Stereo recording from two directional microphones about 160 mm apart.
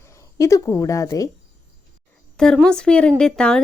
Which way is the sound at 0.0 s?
20° left (ahead or behind).